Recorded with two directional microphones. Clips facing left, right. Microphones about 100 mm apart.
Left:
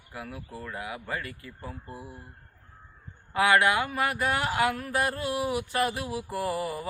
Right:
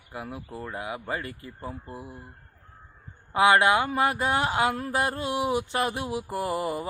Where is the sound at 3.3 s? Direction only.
25° right (ahead or behind).